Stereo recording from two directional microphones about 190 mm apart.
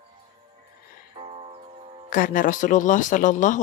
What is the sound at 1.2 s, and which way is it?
Music, 35° right (ahead or behind).